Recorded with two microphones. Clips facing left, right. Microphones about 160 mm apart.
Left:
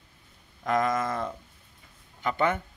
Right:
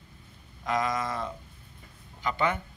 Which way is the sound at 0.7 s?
50° left (ahead or behind).